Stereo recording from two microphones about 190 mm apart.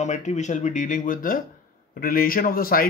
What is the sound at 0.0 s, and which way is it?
A man's voice, 40° left (ahead or behind).